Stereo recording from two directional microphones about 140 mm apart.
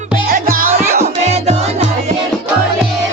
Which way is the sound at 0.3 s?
90° right.